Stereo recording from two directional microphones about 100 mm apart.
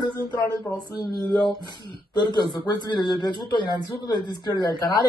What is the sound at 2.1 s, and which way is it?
A man's voice, 45° left (ahead or behind).